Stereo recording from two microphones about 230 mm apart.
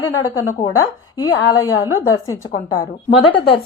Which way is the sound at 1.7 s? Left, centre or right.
Left.